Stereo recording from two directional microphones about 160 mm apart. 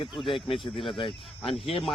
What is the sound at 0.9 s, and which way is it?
Speech, 30° left (ahead or behind).